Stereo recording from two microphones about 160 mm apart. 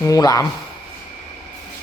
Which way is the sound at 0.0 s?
20° left (ahead or behind).